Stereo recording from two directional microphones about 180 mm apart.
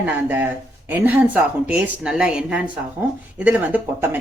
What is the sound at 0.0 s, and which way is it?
Speech, 10° right (ahead or behind).